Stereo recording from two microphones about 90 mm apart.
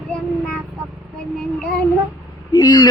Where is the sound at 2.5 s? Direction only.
45° left (ahead or behind).